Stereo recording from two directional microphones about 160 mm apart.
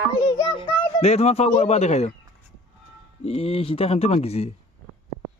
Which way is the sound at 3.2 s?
40° left (ahead or behind).